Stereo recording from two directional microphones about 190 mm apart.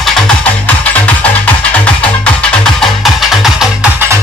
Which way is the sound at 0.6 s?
5° left (ahead or behind).